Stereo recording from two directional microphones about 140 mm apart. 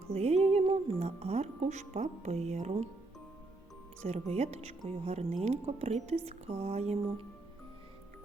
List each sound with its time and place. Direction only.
0.1 s speech: 50° right (ahead or behind)
4.0 s speech: 50° right (ahead or behind)